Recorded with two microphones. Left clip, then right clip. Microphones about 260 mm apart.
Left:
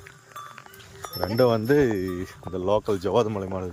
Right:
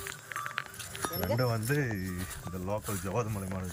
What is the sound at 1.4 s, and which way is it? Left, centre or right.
Speech, left.